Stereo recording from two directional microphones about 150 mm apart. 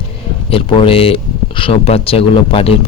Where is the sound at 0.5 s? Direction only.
35° left (ahead or behind).